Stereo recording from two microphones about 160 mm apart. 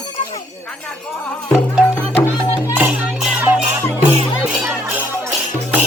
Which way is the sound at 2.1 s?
15° left (ahead or behind).